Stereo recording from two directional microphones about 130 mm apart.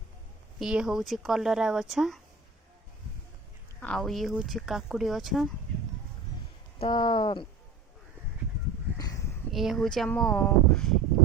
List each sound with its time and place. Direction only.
0.6 s speech: 5° right (ahead or behind)
3.8 s speech: 5° left (ahead or behind)
6.7 s speech: 40° left (ahead or behind)
9.5 s speech: centre (ahead or behind)